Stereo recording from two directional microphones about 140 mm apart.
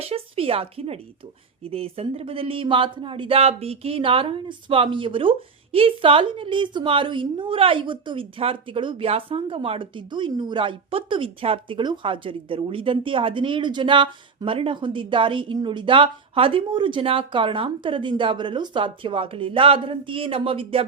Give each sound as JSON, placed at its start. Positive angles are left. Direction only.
{"t": 0.0, "sound": "speech", "side_deg": -45}